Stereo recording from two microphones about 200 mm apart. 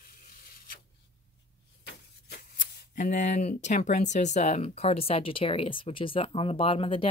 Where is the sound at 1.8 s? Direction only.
55° left (ahead or behind).